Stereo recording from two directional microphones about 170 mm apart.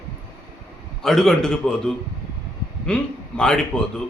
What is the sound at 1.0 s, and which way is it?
A man's voice, 5° left (ahead or behind).